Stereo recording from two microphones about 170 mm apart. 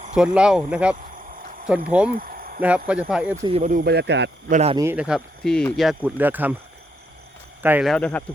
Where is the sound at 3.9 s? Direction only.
85° right.